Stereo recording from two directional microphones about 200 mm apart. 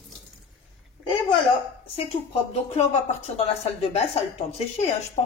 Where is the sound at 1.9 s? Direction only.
30° left (ahead or behind).